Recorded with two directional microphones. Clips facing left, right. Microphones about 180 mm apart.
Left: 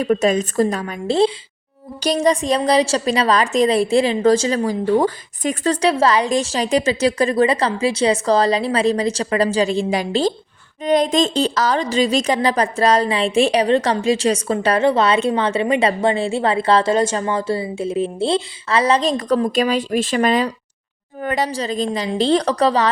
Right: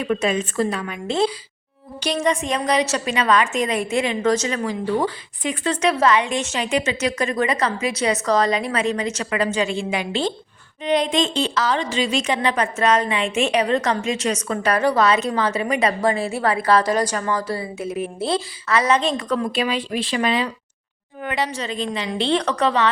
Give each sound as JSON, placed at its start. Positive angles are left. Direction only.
{"t": 0.0, "sound": "a woman's voice", "side_deg": 40}